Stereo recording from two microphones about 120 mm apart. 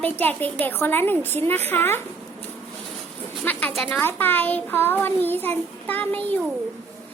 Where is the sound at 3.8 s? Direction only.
15° left (ahead or behind).